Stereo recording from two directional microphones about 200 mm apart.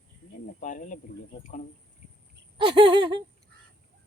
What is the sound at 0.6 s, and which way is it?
Speech, 40° left (ahead or behind).